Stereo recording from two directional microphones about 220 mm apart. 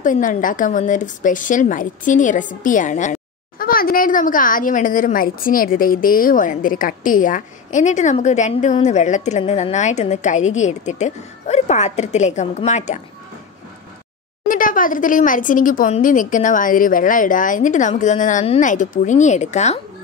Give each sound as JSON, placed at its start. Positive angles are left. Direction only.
{"t": 0.0, "sound": "a woman's voice", "side_deg": 35}
{"t": 14.5, "sound": "a woman's voice", "side_deg": 40}